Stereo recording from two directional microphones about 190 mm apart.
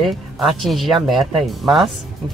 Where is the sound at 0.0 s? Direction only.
Centre (ahead or behind).